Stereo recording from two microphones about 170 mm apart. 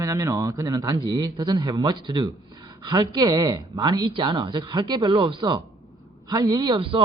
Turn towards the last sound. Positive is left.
turn(degrees=-30)  # may be behind; listen again after turning